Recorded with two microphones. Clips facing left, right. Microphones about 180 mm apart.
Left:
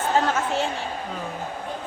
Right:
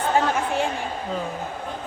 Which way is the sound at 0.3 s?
15° right (ahead or behind).